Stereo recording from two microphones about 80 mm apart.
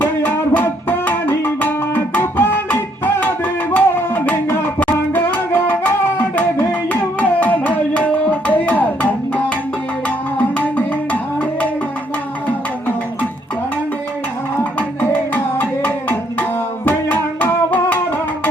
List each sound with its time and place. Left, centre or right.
0.0 s music: left
7.2 s music: centre
15.3 s music: left